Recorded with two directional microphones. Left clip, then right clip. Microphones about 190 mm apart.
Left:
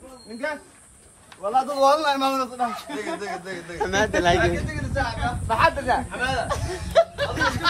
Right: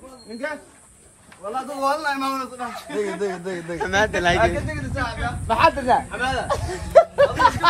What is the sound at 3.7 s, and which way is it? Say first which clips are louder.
Speech: right 1 dB; 10° left (ahead or behind).